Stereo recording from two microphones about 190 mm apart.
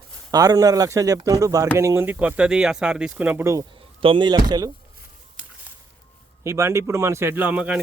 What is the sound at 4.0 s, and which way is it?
Speech, 25° right (ahead or behind).